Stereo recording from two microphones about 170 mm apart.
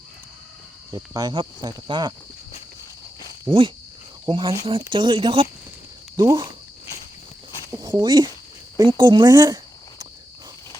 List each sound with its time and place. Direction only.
0.9 s speech: 20° right (ahead or behind)
3.5 s speech: 10° right (ahead or behind)
4.3 s speech: 30° right (ahead or behind)
7.7 s a sound: 20° right (ahead or behind)
8.8 s speech: 25° right (ahead or behind)